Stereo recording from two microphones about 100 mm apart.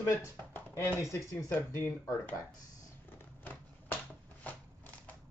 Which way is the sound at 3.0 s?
20° left (ahead or behind).